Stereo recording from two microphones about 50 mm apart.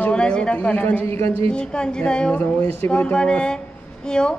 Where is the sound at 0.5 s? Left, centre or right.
Left.